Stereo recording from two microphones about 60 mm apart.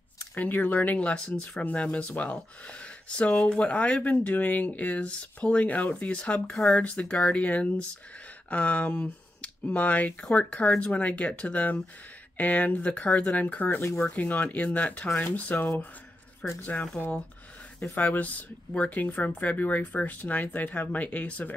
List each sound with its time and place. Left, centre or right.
0.3 s speech: left
17.9 s speech: left